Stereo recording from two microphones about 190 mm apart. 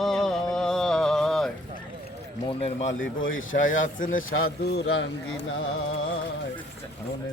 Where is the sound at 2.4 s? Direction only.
30° left (ahead or behind).